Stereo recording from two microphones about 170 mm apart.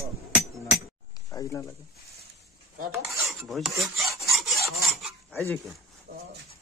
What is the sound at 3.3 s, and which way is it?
Filing, centre (ahead or behind).